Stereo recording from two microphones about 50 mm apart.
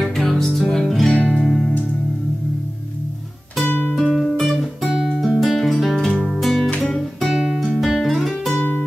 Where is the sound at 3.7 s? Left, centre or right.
Left.